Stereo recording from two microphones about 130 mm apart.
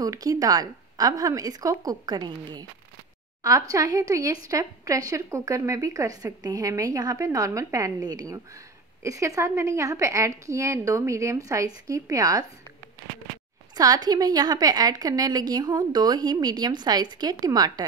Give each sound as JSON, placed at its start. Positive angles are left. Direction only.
{"t": 0.0, "sound": "speech", "side_deg": -25}
{"t": 13.7, "sound": "a woman's voice", "side_deg": -30}